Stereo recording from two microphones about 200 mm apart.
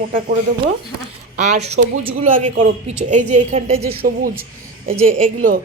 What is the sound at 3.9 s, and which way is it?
A woman's voice, 45° right (ahead or behind).